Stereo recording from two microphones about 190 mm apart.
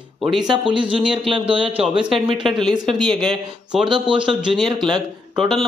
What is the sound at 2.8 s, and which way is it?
Speech, 5° left (ahead or behind).